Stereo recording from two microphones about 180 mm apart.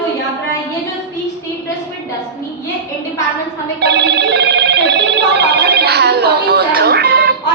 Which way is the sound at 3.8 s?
70° right (ahead or behind).